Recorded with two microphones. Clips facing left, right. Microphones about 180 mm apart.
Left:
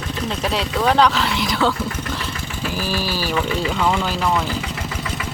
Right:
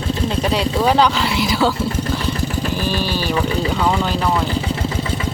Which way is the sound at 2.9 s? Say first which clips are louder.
Right 3 dB; 5° left (ahead or behind).